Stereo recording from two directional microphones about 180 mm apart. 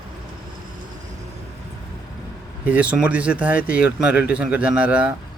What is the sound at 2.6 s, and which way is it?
Speech, 10° right (ahead or behind).